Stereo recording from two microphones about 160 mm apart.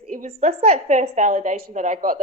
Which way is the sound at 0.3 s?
40° right (ahead or behind).